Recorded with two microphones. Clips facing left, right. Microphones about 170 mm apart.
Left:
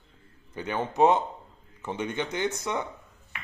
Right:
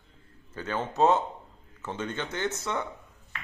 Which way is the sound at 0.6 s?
15° left (ahead or behind).